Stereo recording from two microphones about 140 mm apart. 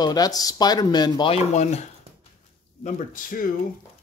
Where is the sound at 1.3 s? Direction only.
55° left (ahead or behind).